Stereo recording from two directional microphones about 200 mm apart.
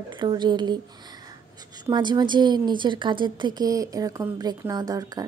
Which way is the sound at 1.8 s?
20° right (ahead or behind).